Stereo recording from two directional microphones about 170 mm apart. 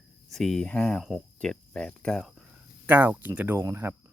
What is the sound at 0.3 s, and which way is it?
Speech, centre (ahead or behind).